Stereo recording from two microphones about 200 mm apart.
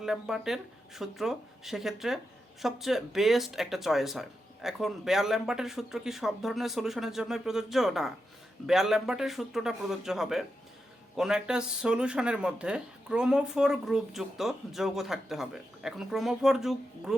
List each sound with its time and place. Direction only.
0.0 s speech: centre (ahead or behind)